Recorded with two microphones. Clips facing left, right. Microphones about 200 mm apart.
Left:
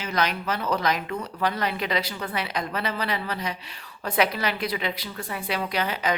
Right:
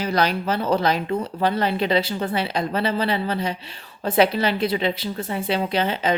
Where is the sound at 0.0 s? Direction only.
35° right (ahead or behind).